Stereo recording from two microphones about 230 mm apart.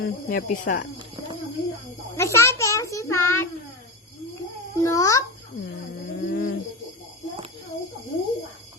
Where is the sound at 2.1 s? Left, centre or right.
Centre.